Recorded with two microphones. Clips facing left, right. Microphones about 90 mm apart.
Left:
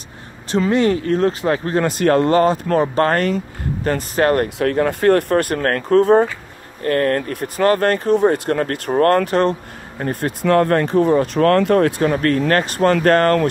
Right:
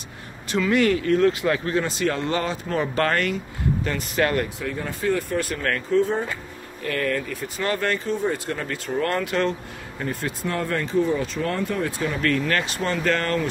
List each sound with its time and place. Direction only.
0.5 s speech: 35° left (ahead or behind)
1.8 s speech: 50° left (ahead or behind)
2.9 s speech: 35° left (ahead or behind)
4.6 s speech: 70° left (ahead or behind)
6.8 s speech: 45° left (ahead or behind)
10.4 s speech: 60° left (ahead or behind)